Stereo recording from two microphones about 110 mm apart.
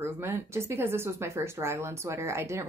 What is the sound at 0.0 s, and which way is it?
Speech, 20° right (ahead or behind).